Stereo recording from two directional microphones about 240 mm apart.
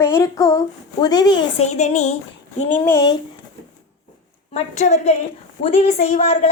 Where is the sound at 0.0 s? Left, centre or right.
Centre; by 2.1 s left.